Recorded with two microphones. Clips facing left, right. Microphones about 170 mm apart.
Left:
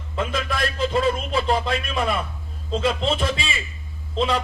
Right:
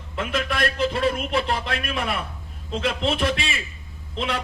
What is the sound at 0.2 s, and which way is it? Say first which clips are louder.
A man's voice: even; 65° right (ahead or behind).